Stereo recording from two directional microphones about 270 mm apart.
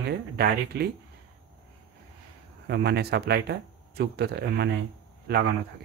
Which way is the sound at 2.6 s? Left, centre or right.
Right.